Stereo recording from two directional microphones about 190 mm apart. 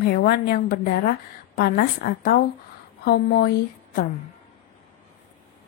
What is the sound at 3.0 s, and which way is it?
Speech, 55° left (ahead or behind).